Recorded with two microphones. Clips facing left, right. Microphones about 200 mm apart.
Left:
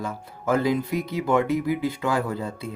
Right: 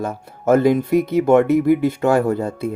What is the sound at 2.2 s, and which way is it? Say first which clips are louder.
Speech: right 9 dB; 45° right (ahead or behind).